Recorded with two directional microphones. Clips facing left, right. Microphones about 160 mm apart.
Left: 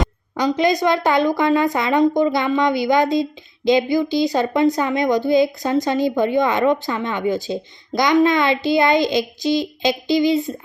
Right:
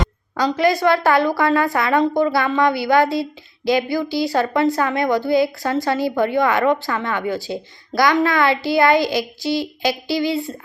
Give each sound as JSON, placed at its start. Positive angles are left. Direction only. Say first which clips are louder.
{"t": 0.3, "sound": "a woman's voice", "louder": "even", "side_deg": 20}